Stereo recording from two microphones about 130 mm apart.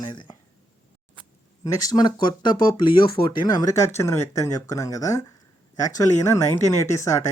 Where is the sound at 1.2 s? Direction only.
40° right (ahead or behind).